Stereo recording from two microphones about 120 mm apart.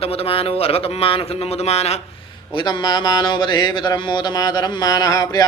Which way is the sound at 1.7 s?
60° left (ahead or behind).